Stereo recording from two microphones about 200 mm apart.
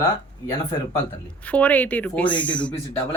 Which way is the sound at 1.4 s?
5° left (ahead or behind).